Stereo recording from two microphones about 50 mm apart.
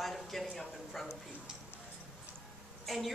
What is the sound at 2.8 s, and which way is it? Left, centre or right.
Speech, centre.